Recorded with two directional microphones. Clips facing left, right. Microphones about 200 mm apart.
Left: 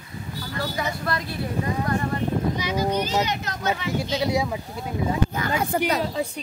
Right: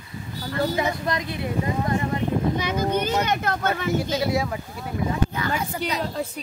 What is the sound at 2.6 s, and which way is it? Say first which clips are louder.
Speech: right 1 dB; 50° right (ahead or behind).